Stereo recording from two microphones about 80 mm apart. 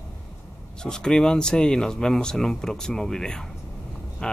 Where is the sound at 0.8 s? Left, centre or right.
Centre.